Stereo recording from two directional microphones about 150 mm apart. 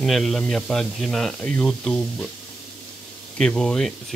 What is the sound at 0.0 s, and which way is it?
Speech, centre (ahead or behind).